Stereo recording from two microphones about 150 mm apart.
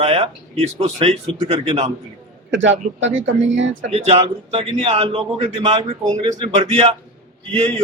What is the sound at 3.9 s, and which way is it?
Speech, 40° right (ahead or behind).